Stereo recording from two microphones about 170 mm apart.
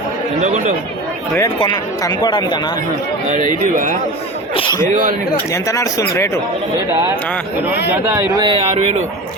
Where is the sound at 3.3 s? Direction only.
50° right (ahead or behind).